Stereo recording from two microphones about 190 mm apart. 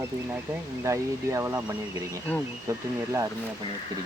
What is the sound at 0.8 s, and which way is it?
Speech, 15° right (ahead or behind).